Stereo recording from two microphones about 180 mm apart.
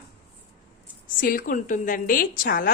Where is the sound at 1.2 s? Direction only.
50° left (ahead or behind).